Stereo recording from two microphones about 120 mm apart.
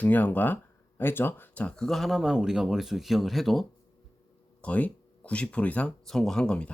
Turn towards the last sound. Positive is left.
turn(degrees=10)  # may be behind; listen again after turning